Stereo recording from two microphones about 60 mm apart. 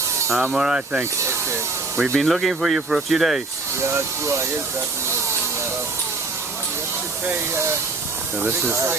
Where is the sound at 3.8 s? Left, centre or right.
Right.